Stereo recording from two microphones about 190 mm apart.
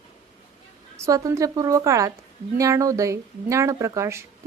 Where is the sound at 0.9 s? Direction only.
15° right (ahead or behind).